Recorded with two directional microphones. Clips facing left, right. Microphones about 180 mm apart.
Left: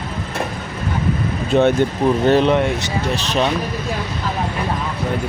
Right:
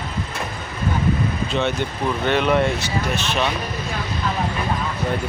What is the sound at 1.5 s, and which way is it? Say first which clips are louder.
Speech: left 12 dB; 50° left (ahead or behind).